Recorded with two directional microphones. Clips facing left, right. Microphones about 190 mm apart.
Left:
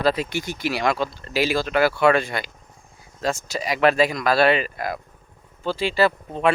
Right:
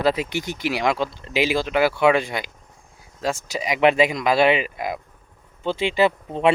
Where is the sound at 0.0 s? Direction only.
20° right (ahead or behind).